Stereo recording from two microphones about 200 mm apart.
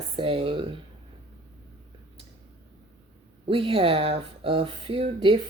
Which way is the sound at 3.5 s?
30° right (ahead or behind).